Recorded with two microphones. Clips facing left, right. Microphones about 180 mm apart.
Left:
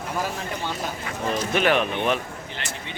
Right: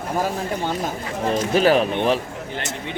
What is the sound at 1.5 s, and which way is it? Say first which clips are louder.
Speech: right 5 dB; 35° right (ahead or behind).